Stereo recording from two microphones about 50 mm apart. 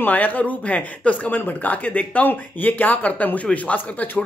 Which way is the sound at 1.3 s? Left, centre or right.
Left.